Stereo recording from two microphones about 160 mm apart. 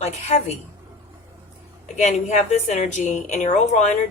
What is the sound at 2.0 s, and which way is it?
Speech, 45° left (ahead or behind).